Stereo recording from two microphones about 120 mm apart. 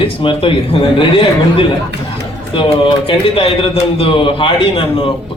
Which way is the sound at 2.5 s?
45° left (ahead or behind).